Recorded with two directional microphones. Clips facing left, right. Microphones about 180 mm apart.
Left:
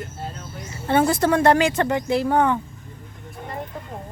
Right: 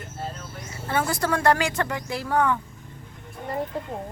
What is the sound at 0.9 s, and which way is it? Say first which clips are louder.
Speech: left 7 dB; 25° left (ahead or behind).